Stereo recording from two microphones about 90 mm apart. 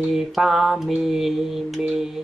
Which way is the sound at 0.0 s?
5° right (ahead or behind).